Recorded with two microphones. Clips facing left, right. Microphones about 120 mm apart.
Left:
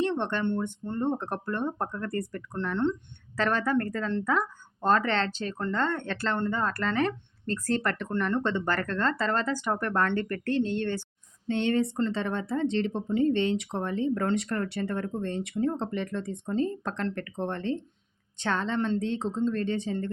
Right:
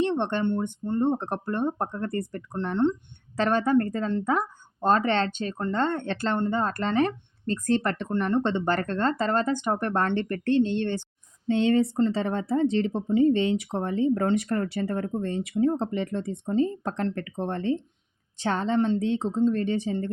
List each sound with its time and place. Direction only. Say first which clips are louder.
0.0 s a sound: right 3 dB; 25° right (ahead or behind)
0.4 s speech: right 3 dB; 15° right (ahead or behind)
15.1 s speech: right 3 dB; 10° right (ahead or behind)